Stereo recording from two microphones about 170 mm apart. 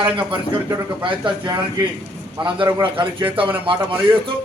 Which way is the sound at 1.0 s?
30° right (ahead or behind).